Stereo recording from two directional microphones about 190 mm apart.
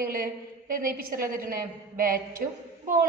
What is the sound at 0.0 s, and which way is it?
A woman's voice, 50° right (ahead or behind).